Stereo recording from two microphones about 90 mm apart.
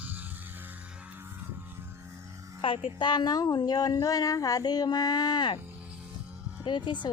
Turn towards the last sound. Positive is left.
turn(degrees=60)  # may be behind; listen again after turning